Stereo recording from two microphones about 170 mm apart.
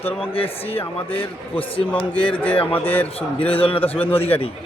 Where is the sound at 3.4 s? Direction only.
30° left (ahead or behind).